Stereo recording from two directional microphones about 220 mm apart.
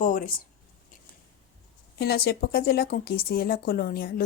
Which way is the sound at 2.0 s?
45° left (ahead or behind).